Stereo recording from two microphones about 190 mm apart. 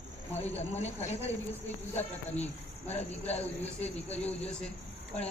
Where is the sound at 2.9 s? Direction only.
35° left (ahead or behind).